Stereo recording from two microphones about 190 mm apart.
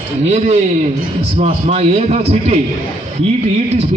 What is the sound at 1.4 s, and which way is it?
A man's voice, 35° right (ahead or behind).